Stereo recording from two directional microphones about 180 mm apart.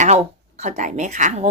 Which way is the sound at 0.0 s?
40° right (ahead or behind).